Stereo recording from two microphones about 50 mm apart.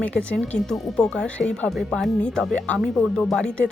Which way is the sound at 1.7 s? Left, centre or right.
Centre.